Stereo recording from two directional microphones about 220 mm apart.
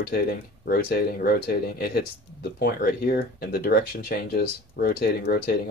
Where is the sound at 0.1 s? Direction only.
45° left (ahead or behind).